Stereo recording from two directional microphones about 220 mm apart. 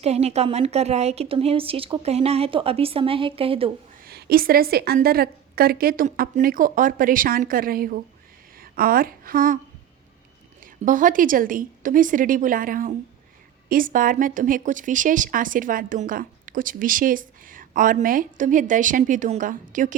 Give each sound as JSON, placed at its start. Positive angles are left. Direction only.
{"t": 0.0, "sound": "a woman's voice", "side_deg": -30}
{"t": 4.0, "sound": "a woman's voice", "side_deg": -45}
{"t": 10.6, "sound": "a woman's voice", "side_deg": -35}